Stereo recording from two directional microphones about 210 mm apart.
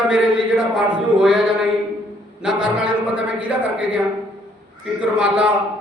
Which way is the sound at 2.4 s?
5° right (ahead or behind).